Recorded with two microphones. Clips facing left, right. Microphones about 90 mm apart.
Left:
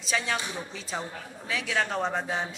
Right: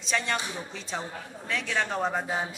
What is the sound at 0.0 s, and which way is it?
A man's voice, centre (ahead or behind).